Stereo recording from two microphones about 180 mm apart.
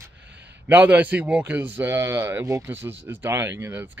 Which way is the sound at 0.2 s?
70° right (ahead or behind).